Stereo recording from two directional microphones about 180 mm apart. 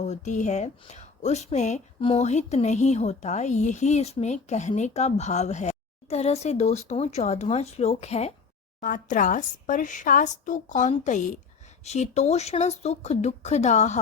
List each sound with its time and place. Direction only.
0.0 s a woman's voice: 40° left (ahead or behind)